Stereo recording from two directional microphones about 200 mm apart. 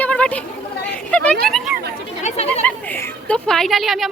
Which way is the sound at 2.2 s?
30° left (ahead or behind).